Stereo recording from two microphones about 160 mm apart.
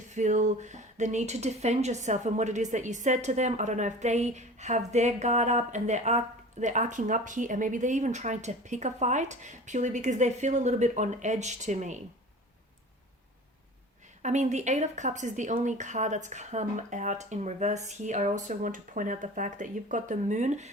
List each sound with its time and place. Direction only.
0.1 s speech: 50° right (ahead or behind)
14.2 s speech: 45° right (ahead or behind)